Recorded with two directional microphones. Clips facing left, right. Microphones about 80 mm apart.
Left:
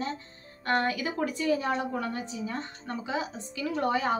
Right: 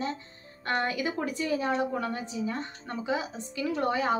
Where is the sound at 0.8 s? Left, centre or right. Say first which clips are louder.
Left 1 dB; right.